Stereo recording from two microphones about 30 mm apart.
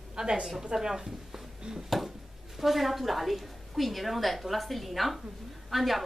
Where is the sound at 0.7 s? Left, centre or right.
Centre.